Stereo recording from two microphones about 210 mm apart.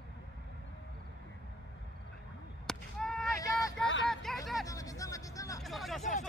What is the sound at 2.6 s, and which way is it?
Honk, 5° left (ahead or behind).